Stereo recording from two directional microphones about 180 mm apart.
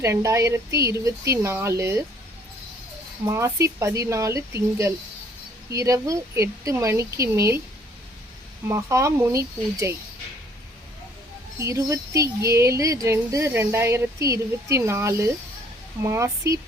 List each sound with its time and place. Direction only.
0.0 s speech: 15° right (ahead or behind)
3.2 s speech: 15° right (ahead or behind)
8.6 s speech: 15° right (ahead or behind)
11.6 s speech: 15° right (ahead or behind)